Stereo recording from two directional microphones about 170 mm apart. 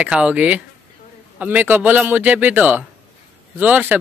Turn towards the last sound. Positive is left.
turn(degrees=-10)  # may be behind; listen again after turning